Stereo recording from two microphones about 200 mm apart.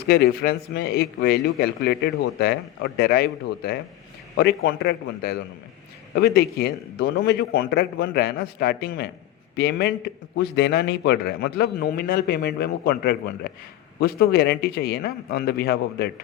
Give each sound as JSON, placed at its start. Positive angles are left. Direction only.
{"t": 0.1, "sound": "a man's voice", "side_deg": 55}
{"t": 4.4, "sound": "a man's voice", "side_deg": 55}